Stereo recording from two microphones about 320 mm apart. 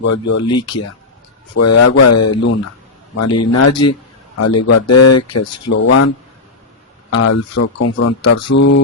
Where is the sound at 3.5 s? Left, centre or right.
Left.